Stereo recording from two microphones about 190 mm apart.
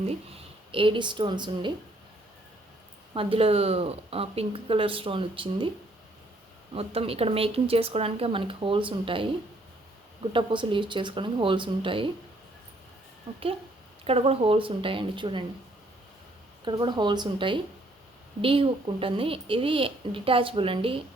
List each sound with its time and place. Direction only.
0.7 s a woman's voice: 30° right (ahead or behind)
3.2 s a woman's voice: 30° right (ahead or behind)
6.7 s a woman's voice: 30° right (ahead or behind)
10.3 s a woman's voice: 25° right (ahead or behind)
14.0 s a woman's voice: 30° right (ahead or behind)
16.6 s a woman's voice: 25° right (ahead or behind)